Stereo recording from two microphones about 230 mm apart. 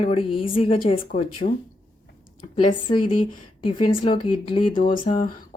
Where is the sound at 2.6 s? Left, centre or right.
Left.